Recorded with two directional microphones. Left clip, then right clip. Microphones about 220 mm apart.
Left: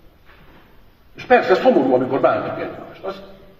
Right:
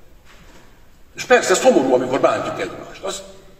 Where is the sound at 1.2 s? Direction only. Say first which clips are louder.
Even; 45° right (ahead or behind).